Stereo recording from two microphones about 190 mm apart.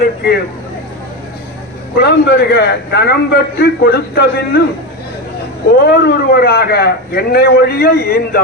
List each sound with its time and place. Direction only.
2.0 s a man's voice: 60° left (ahead or behind)
5.8 s a man's voice: 55° left (ahead or behind)